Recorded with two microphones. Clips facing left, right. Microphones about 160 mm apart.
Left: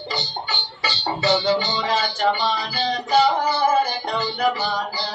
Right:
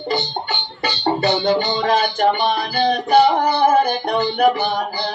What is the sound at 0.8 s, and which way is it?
Music, 55° right (ahead or behind).